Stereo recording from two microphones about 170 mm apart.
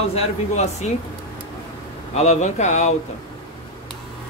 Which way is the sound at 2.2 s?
45° left (ahead or behind).